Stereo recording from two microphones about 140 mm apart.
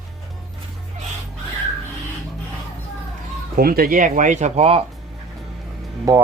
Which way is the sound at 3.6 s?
90° right.